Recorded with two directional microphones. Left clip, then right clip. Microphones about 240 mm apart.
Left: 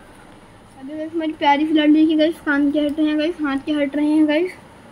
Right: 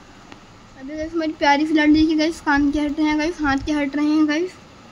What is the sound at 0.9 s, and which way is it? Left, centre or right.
A woman's voice, centre.